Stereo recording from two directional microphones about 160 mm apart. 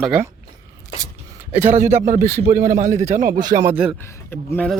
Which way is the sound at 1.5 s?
15° right (ahead or behind).